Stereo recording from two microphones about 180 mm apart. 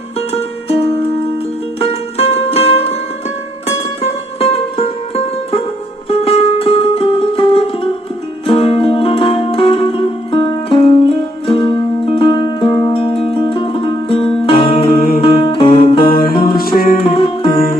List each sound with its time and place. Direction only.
0.2 s music: 35° left (ahead or behind)
4.4 s music: 35° left (ahead or behind)
16.0 s music: 55° left (ahead or behind)
17.0 s music: 30° left (ahead or behind)